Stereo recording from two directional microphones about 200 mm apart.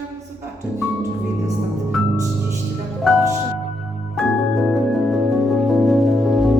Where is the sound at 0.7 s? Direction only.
15° right (ahead or behind).